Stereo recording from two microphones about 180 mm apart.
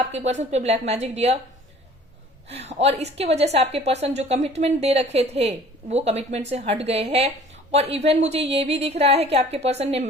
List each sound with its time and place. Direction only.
0.1 s a woman's voice: 40° right (ahead or behind)
2.5 s a woman's voice: 35° right (ahead or behind)